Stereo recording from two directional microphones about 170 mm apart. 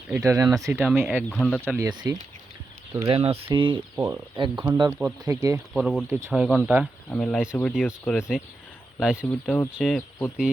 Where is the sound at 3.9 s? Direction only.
15° right (ahead or behind).